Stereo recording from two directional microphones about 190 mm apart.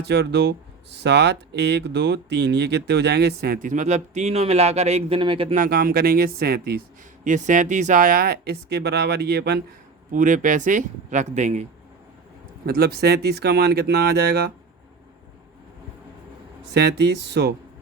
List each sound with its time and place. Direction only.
0.0 s speech: 60° right (ahead or behind); by 5.5 s 30° right (ahead or behind)
5.5 s speech: 50° right (ahead or behind)
7.3 s speech: 40° right (ahead or behind); by 9.6 s 60° right (ahead or behind)
10.1 s speech: 40° right (ahead or behind)
12.6 s speech: 55° right (ahead or behind)
16.7 s speech: 60° right (ahead or behind)